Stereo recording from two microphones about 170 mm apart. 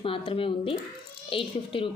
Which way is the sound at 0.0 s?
30° left (ahead or behind).